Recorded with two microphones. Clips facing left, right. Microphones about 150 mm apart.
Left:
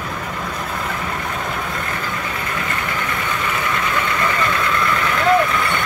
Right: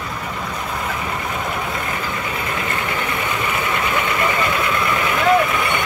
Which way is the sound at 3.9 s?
20° right (ahead or behind).